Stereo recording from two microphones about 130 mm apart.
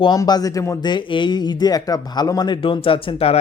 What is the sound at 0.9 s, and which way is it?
Speech, 40° left (ahead or behind).